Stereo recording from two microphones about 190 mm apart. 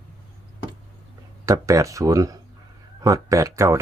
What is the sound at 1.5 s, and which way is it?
Speech, 15° right (ahead or behind).